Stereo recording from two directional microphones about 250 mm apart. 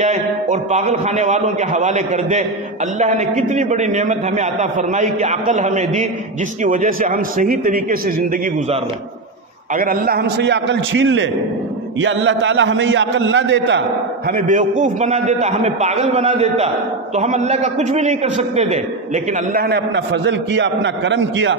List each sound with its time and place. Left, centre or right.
0.0 s a man's voice: right
9.8 s a man's voice: right
14.3 s a man's voice: right